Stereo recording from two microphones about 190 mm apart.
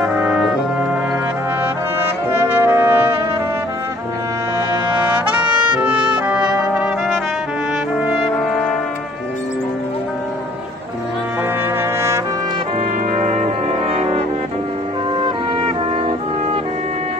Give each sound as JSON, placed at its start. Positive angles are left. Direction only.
{"t": 0.0, "sound": "brass instrument", "side_deg": -5}
{"t": 2.0, "sound": "brass instrument", "side_deg": -10}
{"t": 5.1, "sound": "trumpet", "side_deg": -5}
{"t": 13.1, "sound": "brass instrument", "side_deg": -35}
{"t": 15.1, "sound": "music", "side_deg": -25}